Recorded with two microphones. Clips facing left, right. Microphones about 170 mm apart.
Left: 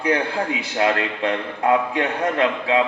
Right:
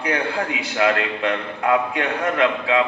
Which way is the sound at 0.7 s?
30° left (ahead or behind).